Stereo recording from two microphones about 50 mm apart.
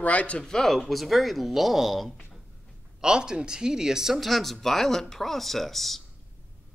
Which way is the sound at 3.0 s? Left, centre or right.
Centre.